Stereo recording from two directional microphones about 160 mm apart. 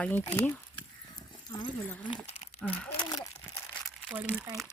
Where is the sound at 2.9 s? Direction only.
25° left (ahead or behind).